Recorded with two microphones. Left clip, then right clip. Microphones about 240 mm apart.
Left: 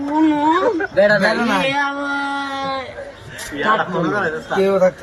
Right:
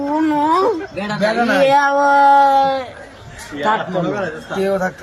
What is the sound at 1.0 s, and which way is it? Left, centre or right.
Speech, centre.